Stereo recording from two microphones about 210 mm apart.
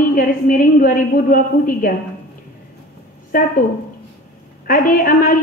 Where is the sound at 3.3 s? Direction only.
45° left (ahead or behind).